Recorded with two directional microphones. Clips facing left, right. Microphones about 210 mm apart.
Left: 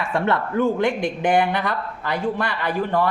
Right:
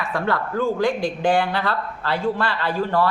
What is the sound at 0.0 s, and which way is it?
A man's voice, 25° left (ahead or behind).